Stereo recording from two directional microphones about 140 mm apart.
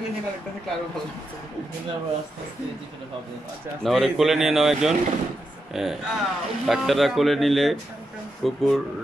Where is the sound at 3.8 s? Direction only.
Centre (ahead or behind).